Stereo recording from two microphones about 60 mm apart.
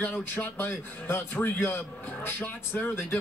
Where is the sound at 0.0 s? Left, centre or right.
Left.